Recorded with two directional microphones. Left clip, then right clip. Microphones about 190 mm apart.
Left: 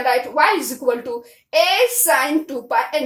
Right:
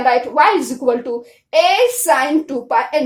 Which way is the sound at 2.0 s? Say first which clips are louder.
Right 3 dB; 35° right (ahead or behind).